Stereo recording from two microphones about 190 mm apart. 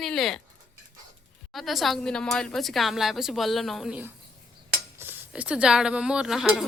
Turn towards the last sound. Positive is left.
turn(degrees=0)  # may be behind; listen again after turning